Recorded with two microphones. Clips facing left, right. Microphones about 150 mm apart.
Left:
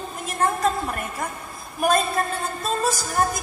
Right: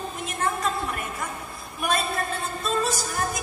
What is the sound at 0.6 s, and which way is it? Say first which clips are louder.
Speech: left 4 dB; 45° left (ahead or behind).